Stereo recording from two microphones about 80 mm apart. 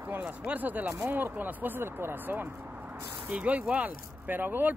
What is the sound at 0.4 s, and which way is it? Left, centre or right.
Speech, centre.